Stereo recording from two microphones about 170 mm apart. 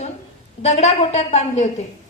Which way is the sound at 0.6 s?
40° left (ahead or behind).